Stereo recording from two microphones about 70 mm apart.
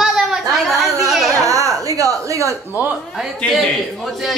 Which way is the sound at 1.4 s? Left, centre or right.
Right.